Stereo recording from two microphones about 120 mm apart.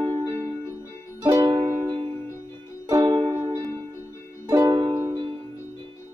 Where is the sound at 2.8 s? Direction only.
30° right (ahead or behind).